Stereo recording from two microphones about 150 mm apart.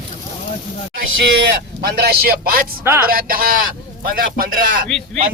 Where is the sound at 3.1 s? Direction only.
75° right (ahead or behind).